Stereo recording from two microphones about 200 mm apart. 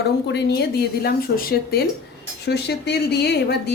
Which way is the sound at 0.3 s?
55° left (ahead or behind).